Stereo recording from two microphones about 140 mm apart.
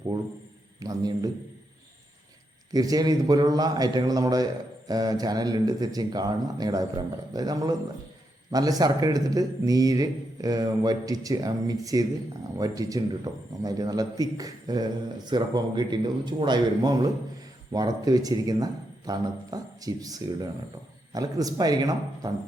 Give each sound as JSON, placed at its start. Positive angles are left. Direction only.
{"t": 0.8, "sound": "a man's voice", "side_deg": -25}
{"t": 2.7, "sound": "speech", "side_deg": -25}